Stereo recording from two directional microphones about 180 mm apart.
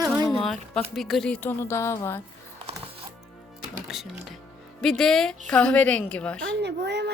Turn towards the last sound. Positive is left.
turn(degrees=-70)  # may be behind; listen again after turning